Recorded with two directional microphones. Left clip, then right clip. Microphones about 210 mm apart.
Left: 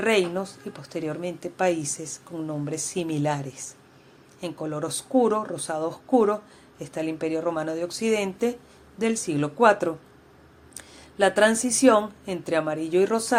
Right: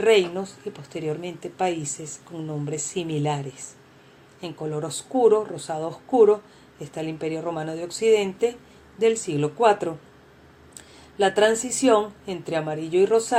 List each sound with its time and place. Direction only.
0.0 s a woman's voice: 30° left (ahead or behind)
11.2 s a woman's voice: 35° left (ahead or behind)